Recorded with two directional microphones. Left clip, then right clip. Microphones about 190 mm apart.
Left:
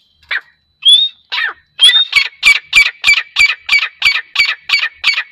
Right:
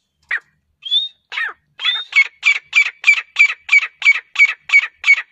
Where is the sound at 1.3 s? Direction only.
10° right (ahead or behind).